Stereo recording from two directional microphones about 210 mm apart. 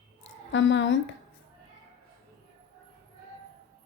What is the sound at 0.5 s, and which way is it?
Speech, 60° left (ahead or behind).